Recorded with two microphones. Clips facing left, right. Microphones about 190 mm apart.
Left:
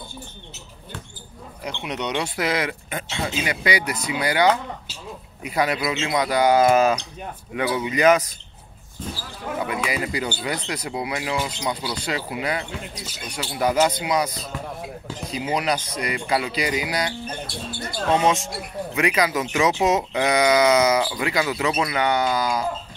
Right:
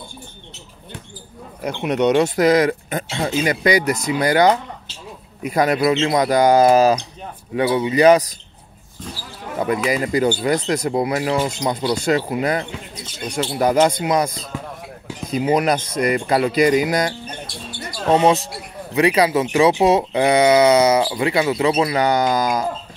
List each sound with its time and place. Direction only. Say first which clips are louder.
1.6 s speech: right 10 dB; 50° right (ahead or behind)
9.6 s speech: right 7 dB; 45° right (ahead or behind)
12.9 s speech: right 1 dB; 10° left (ahead or behind)
13.3 s speech: right 5 dB; 45° right (ahead or behind)
15.3 s speech: right 7 dB; 50° right (ahead or behind)
18.1 s speech: right 5 dB; 35° right (ahead or behind)